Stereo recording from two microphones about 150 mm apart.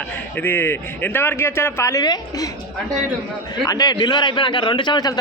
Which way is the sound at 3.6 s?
25° left (ahead or behind).